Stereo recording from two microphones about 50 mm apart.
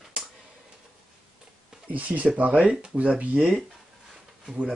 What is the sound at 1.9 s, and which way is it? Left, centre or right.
A man's voice, right.